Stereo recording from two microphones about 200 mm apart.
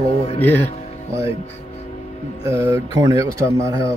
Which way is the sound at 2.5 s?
15° right (ahead or behind).